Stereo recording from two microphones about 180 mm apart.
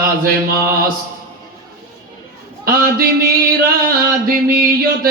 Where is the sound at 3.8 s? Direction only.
55° right (ahead or behind).